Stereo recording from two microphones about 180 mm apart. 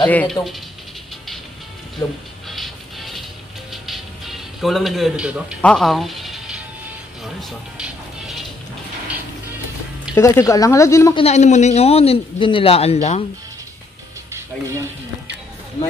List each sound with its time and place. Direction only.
0.1 s speech: 5° left (ahead or behind)
2.4 s music: centre (ahead or behind)
5.6 s music: 5° left (ahead or behind)
7.7 s music: 5° right (ahead or behind)
10.1 s speech: 15° left (ahead or behind)
11.1 s a man's voice: 35° left (ahead or behind)
14.3 s speech: 15° right (ahead or behind)